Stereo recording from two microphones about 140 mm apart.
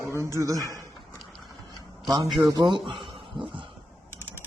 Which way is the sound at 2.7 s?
35° right (ahead or behind).